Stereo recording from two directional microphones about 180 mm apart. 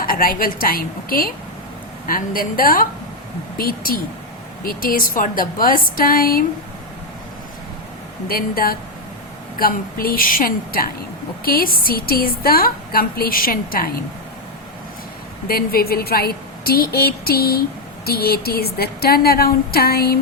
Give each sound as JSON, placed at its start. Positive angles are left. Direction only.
{"t": 0.0, "sound": "a woman's voice", "side_deg": 50}
{"t": 8.3, "sound": "a woman's voice", "side_deg": 55}
{"t": 15.4, "sound": "a woman's voice", "side_deg": 55}